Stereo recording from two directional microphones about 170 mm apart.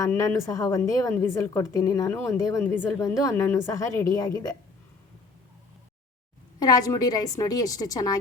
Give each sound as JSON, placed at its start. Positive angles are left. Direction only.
{"t": 0.0, "sound": "a woman's voice", "side_deg": 20}
{"t": 6.6, "sound": "a woman's voice", "side_deg": 25}